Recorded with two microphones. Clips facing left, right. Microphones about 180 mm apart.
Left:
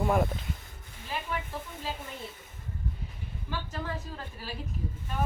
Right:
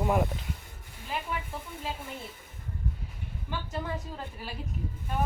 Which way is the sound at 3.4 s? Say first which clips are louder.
Right 1 dB; 15° right (ahead or behind).